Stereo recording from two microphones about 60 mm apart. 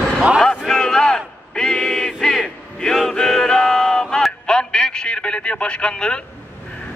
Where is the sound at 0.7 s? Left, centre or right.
Centre.